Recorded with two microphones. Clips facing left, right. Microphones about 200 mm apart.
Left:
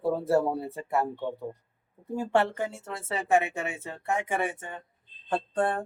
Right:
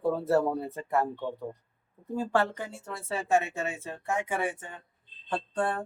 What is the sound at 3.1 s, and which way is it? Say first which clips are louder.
Speech: left 2 dB; 75° left (ahead or behind).